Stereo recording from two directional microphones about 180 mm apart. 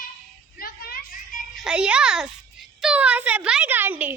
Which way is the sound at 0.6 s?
55° left (ahead or behind).